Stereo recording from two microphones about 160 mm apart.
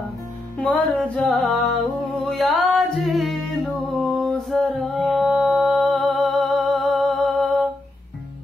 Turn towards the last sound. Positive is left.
turn(degrees=0)  # may be behind; listen again after turning